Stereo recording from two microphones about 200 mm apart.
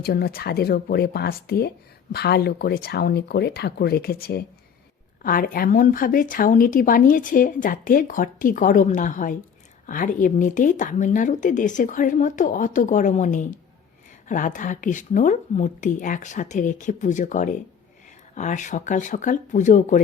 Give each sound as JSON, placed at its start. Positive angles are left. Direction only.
{"t": 0.0, "sound": "a woman's voice", "side_deg": 50}